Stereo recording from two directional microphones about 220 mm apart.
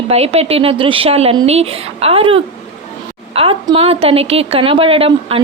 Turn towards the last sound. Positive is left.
turn(degrees=-25)  # may be behind; listen again after turning